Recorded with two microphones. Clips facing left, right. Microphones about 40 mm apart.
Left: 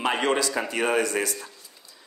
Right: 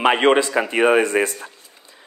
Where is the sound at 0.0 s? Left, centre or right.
Right.